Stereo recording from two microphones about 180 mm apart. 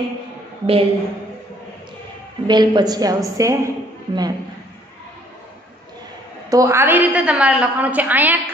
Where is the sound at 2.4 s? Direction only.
25° right (ahead or behind).